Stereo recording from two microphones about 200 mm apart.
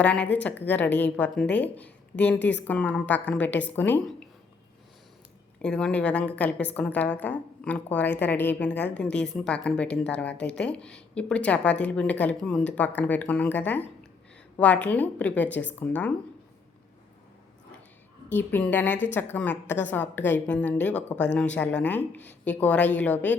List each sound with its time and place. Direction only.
0.0 s a woman's voice: 5° left (ahead or behind)
2.4 s a woman's voice: 60° left (ahead or behind)
2.6 s a woman's voice: 5° left (ahead or behind)
5.6 s a woman's voice: 5° left (ahead or behind)
18.3 s a woman's voice: 10° left (ahead or behind)